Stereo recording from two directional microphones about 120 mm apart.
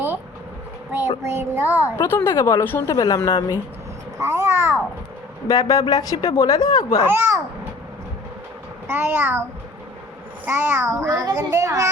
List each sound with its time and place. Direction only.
0.9 s a child's voice: 20° right (ahead or behind)
2.0 s a woman's voice: 20° left (ahead or behind)
4.2 s babbling: 20° right (ahead or behind)
5.5 s a man's voice: 30° left (ahead or behind)
7.1 s a child's voice: 20° right (ahead or behind)
8.9 s a child's voice: 20° right (ahead or behind)